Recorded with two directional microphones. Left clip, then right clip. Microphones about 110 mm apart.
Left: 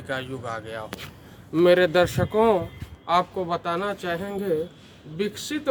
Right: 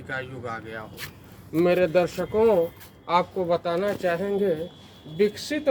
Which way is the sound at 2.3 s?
55° left (ahead or behind).